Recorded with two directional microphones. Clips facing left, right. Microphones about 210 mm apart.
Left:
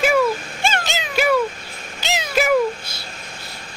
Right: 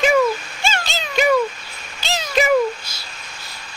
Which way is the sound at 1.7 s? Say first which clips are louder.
Left 3 dB; 50° left (ahead or behind).